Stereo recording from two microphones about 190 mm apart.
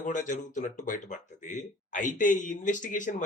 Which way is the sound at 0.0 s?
40° left (ahead or behind).